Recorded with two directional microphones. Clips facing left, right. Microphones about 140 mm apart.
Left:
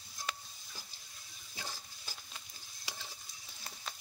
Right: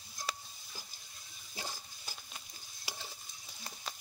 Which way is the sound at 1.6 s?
15° right (ahead or behind).